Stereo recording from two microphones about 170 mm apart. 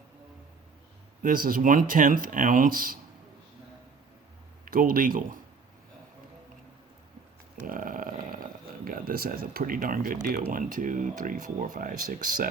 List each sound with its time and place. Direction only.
1.2 s speech: 55° right (ahead or behind)
4.6 s speech: 55° right (ahead or behind)
7.5 s speech: 55° right (ahead or behind)